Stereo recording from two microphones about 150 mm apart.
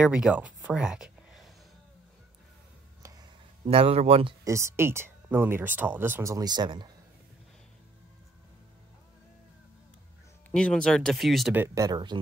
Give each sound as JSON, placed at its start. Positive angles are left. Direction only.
{"t": 0.0, "sound": "speech", "side_deg": -5}
{"t": 3.0, "sound": "a sound", "side_deg": -25}
{"t": 3.6, "sound": "speech", "side_deg": -40}
{"t": 4.5, "sound": "speech", "side_deg": -20}
{"t": 10.5, "sound": "speech", "side_deg": 5}
{"t": 11.5, "sound": "speech", "side_deg": -20}